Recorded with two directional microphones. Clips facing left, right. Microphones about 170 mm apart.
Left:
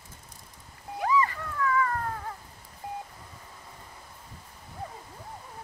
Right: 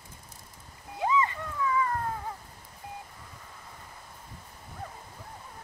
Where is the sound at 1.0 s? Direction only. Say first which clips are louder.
Left 1 dB; 20° right (ahead or behind).